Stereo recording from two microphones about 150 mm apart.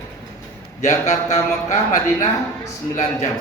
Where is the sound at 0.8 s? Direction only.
50° left (ahead or behind).